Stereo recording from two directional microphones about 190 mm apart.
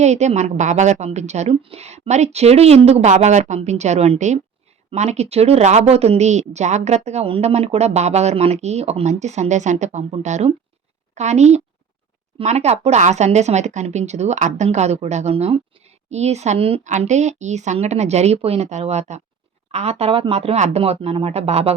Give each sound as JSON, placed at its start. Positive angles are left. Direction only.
{"t": 0.0, "sound": "speech", "side_deg": -35}